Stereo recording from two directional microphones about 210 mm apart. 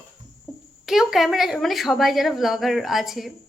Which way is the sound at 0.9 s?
Centre (ahead or behind).